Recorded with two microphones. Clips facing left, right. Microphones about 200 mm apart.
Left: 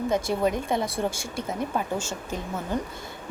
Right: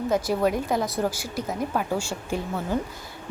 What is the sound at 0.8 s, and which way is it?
Speech, 25° left (ahead or behind).